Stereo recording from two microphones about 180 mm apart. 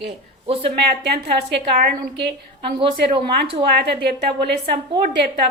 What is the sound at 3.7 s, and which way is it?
Speech, 65° right (ahead or behind).